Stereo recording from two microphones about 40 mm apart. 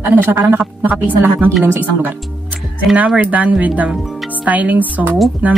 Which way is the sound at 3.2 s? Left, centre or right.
Right.